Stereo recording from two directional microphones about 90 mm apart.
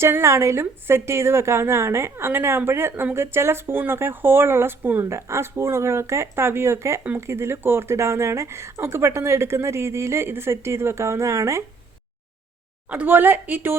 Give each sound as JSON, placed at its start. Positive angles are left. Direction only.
{"t": 0.0, "sound": "a woman's voice", "side_deg": -30}
{"t": 5.0, "sound": "speech", "side_deg": -30}
{"t": 12.9, "sound": "a woman's voice", "side_deg": -20}